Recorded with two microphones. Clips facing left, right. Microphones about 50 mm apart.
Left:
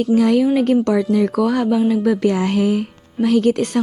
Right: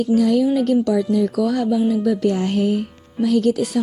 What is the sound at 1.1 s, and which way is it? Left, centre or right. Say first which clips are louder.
Music: left 2 dB; left.